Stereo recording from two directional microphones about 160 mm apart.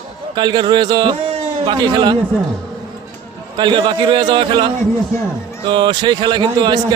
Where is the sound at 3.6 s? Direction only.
30° right (ahead or behind).